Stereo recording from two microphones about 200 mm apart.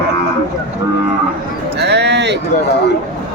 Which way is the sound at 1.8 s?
60° right (ahead or behind).